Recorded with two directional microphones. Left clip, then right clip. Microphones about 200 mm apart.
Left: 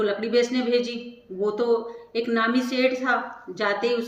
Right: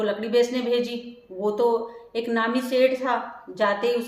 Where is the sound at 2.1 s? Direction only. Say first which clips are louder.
Left 1 dB; 15° right (ahead or behind).